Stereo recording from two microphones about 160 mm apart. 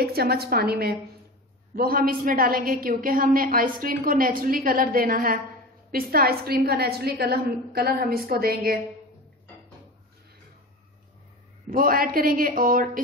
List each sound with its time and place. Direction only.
0.0 s a woman's voice: 75° right (ahead or behind)
1.8 s a woman's voice: 65° right (ahead or behind)
11.7 s a woman's voice: 65° right (ahead or behind)